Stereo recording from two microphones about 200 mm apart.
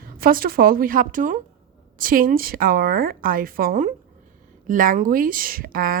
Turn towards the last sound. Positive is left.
turn(degrees=-45)  # may be behind; listen again after turning